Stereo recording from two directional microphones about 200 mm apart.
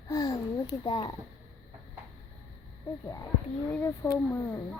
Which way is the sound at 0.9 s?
25° left (ahead or behind).